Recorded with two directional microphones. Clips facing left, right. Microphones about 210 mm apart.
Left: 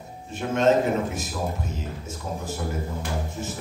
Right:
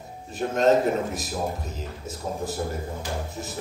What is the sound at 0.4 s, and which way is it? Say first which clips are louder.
Speech: even; 35° right (ahead or behind).